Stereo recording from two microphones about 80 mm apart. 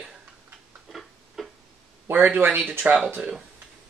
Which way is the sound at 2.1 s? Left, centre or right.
Right.